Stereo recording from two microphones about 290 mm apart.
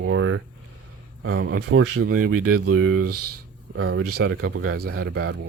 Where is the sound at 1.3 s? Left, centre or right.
Right.